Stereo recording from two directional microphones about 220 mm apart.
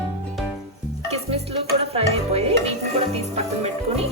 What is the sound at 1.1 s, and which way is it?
Music, 30° right (ahead or behind).